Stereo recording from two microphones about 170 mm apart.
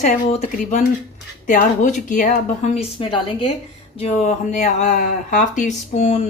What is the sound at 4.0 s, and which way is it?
Speech, 40° left (ahead or behind).